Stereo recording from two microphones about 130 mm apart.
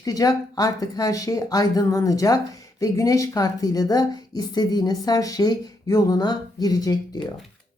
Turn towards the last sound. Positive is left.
turn(degrees=30)  # may be behind; listen again after turning